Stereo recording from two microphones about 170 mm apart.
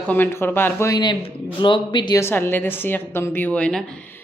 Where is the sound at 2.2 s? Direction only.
15° left (ahead or behind).